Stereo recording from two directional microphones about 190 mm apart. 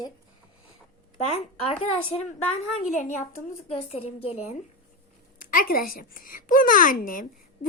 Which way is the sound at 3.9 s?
30° left (ahead or behind).